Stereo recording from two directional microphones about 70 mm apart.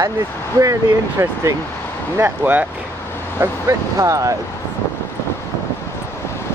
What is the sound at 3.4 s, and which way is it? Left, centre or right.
Speech, right.